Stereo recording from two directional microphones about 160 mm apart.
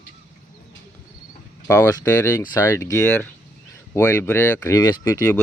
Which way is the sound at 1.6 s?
15° left (ahead or behind).